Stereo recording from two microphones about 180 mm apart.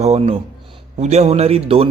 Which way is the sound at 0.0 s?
35° right (ahead or behind).